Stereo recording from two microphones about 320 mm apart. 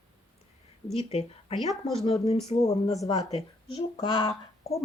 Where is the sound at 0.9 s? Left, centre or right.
Centre.